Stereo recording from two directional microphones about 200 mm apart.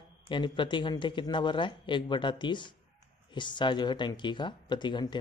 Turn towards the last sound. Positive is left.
turn(degrees=25)  # may be behind; listen again after turning